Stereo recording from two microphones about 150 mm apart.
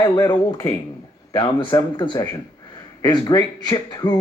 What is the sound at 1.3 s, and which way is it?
Speech, 35° left (ahead or behind).